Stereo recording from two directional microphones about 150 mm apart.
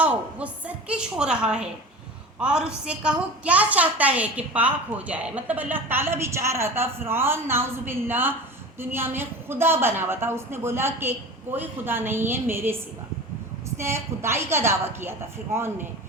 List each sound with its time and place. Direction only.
0.3 s a woman's voice: 10° right (ahead or behind)